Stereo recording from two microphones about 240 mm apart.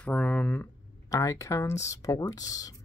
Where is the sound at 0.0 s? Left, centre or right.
Centre.